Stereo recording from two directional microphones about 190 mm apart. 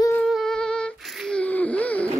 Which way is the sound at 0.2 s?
Centre (ahead or behind).